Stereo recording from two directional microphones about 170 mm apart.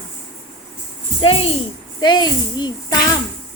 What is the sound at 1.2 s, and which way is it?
A child's voice, 35° left (ahead or behind).